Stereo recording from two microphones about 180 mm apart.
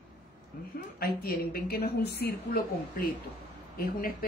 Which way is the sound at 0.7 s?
55° left (ahead or behind).